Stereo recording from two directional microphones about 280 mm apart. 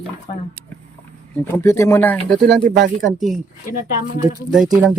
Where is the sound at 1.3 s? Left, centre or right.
Centre.